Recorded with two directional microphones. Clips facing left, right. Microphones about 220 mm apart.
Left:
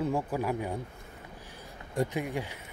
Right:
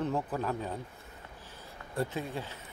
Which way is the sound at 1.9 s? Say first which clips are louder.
Left 3 dB; 15° left (ahead or behind).